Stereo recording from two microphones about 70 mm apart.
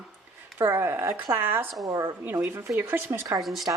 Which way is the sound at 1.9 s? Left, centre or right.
Right.